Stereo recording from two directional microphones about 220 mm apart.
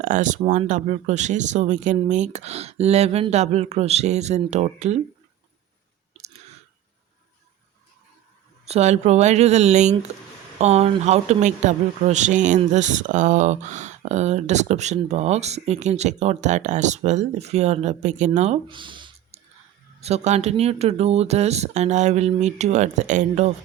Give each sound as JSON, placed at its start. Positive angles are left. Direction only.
{"t": 0.0, "sound": "speech", "side_deg": -35}
{"t": 8.6, "sound": "speech", "side_deg": -30}